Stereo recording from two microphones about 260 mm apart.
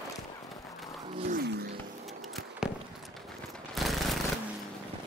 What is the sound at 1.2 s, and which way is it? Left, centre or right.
Wild animals, right.